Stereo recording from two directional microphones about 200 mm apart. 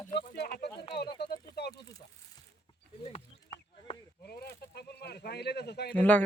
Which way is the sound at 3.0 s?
30° left (ahead or behind).